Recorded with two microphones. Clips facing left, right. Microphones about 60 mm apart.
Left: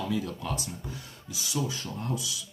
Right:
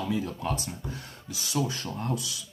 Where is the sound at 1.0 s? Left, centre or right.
Right.